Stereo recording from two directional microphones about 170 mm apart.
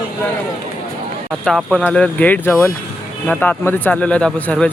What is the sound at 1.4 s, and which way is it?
A man's voice, centre (ahead or behind).